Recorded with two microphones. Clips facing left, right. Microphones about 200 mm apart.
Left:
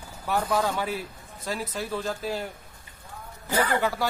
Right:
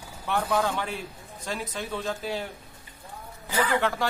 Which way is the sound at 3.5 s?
45° left (ahead or behind).